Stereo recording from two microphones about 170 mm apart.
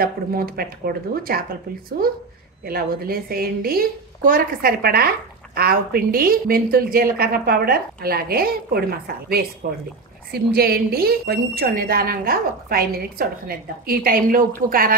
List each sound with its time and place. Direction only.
0.0 s a woman's voice: 60° right (ahead or behind)